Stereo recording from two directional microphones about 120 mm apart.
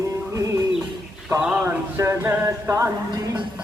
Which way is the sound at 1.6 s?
25° right (ahead or behind).